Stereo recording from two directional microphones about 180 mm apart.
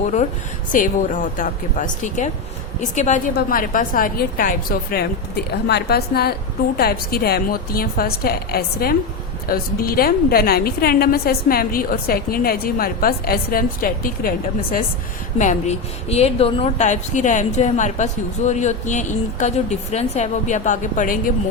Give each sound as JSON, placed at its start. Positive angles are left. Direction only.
{"t": 0.7, "sound": "a woman's voice", "side_deg": 45}
{"t": 5.5, "sound": "a woman's voice", "side_deg": 65}
{"t": 15.4, "sound": "speech", "side_deg": 40}